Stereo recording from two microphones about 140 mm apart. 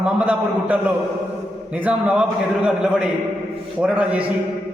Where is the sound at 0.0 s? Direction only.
10° right (ahead or behind).